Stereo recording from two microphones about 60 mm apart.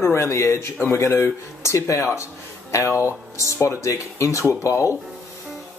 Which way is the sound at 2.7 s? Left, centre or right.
Left.